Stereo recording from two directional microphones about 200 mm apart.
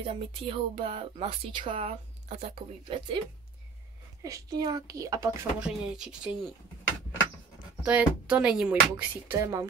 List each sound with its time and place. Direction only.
0.0 s speech: 25° right (ahead or behind)
4.2 s speech: 20° right (ahead or behind)
5.6 s speech: 5° right (ahead or behind)
7.8 s speech: 5° right (ahead or behind)